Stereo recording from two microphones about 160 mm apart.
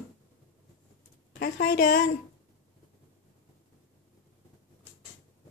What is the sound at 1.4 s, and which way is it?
Speech, 90° left.